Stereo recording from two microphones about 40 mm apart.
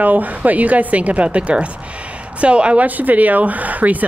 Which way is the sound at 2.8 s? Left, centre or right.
Right.